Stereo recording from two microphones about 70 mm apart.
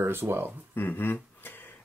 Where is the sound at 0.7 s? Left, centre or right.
Left.